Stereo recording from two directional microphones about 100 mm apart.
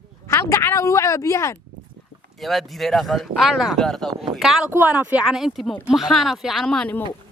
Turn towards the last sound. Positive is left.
turn(degrees=5)  # may be behind; listen again after turning